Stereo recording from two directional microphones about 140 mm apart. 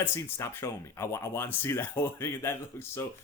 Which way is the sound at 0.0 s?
20° left (ahead or behind).